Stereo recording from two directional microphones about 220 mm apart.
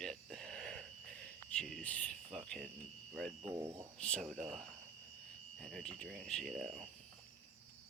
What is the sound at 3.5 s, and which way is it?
Speech, 15° right (ahead or behind).